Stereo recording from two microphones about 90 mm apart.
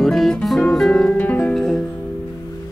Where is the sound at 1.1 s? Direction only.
20° left (ahead or behind).